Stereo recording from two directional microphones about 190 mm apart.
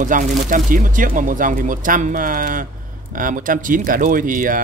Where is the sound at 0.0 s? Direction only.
45° right (ahead or behind).